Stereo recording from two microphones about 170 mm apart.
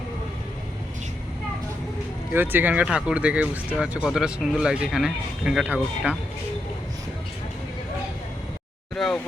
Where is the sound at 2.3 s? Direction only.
10° right (ahead or behind).